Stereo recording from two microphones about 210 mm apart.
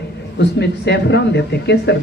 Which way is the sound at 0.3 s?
55° left (ahead or behind).